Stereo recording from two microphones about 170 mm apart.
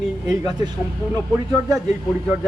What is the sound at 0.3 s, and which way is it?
Speech, 25° right (ahead or behind).